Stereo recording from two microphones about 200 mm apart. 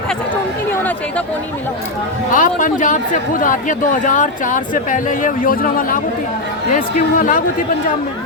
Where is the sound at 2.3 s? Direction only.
40° left (ahead or behind).